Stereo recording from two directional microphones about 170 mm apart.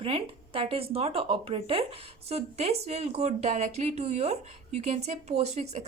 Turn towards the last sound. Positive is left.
turn(degrees=-40)  # may be behind; listen again after turning